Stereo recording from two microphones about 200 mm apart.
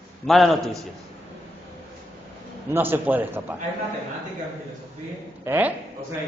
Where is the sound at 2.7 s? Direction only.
10° right (ahead or behind).